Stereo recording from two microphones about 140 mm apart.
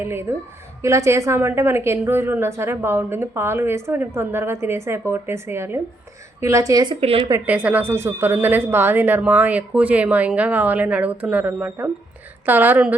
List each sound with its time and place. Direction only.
0.0 s a woman's voice: 15° right (ahead or behind)
7.4 s a woman's voice: 10° right (ahead or behind)